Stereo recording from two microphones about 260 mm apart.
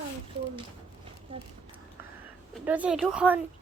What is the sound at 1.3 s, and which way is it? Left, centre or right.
Speech, right.